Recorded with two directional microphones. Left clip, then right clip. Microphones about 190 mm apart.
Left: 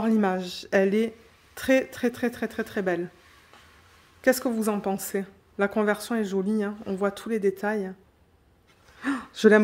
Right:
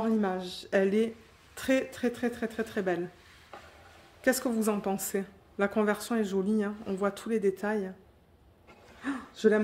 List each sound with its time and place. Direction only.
0.0 s a woman's voice: 40° left (ahead or behind); by 3.0 s 25° left (ahead or behind)
4.2 s a woman's voice: 20° left (ahead or behind)
9.3 s speech: 55° left (ahead or behind)